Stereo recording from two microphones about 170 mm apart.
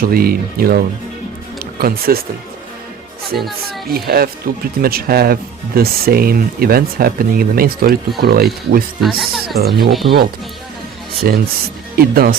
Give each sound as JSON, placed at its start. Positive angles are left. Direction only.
{"t": 0.0, "sound": "speech", "side_deg": -60}
{"t": 1.8, "sound": "speech", "side_deg": -60}
{"t": 3.8, "sound": "speech", "side_deg": -65}
{"t": 9.0, "sound": "speech", "side_deg": 0}
{"t": 9.6, "sound": "speech", "side_deg": -65}
{"t": 11.3, "sound": "speech", "side_deg": -65}